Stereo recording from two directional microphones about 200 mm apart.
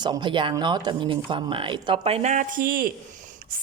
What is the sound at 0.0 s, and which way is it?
A woman's voice, 20° right (ahead or behind).